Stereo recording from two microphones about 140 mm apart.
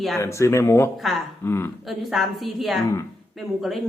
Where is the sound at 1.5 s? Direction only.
15° left (ahead or behind).